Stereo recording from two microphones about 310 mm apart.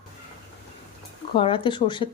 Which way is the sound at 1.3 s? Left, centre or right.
Centre.